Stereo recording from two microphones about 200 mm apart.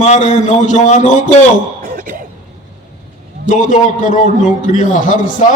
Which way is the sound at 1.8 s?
45° right (ahead or behind).